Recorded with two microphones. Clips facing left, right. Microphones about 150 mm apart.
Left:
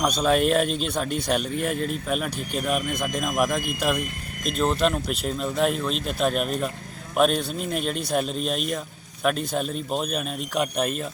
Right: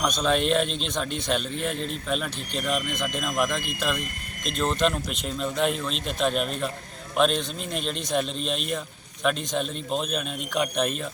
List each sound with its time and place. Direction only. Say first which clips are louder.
0.0 s speech: left 3 dB; 10° left (ahead or behind)